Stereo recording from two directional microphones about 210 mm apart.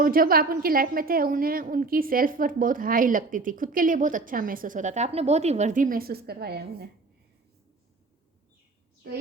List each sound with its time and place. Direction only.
0.0 s a woman's voice: 45° right (ahead or behind)